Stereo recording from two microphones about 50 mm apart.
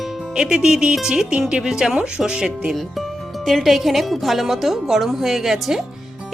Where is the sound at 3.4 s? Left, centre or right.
Centre.